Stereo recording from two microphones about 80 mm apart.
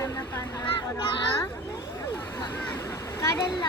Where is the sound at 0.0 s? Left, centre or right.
Left.